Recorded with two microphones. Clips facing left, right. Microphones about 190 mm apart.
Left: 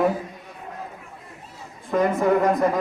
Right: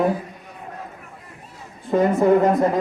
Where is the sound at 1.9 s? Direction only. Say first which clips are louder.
Right 4 dB; 25° right (ahead or behind).